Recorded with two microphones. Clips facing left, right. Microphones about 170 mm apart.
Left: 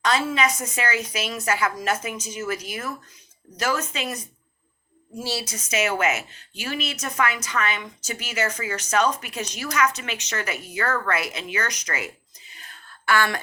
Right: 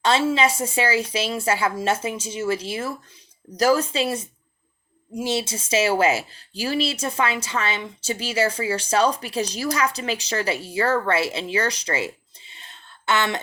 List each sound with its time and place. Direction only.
0.0 s speech: 30° right (ahead or behind)
5.1 s speech: 20° right (ahead or behind)